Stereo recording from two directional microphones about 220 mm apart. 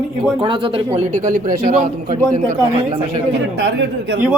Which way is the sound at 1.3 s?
40° right (ahead or behind).